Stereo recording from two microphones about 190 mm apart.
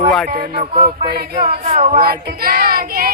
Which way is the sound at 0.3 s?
55° right (ahead or behind).